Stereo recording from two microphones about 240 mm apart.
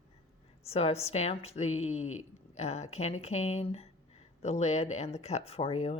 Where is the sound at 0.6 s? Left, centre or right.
Left.